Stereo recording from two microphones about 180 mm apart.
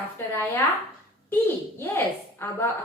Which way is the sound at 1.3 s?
15° left (ahead or behind).